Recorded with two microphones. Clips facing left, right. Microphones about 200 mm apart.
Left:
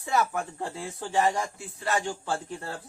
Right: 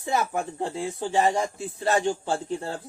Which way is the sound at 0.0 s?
20° right (ahead or behind).